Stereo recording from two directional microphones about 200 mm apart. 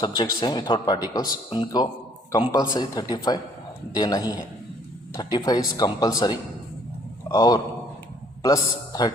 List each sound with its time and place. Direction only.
0.3 s a man's voice: 20° left (ahead or behind)